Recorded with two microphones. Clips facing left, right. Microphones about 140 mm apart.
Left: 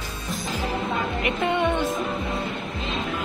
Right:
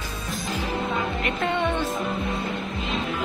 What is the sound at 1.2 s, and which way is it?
Music, 15° left (ahead or behind).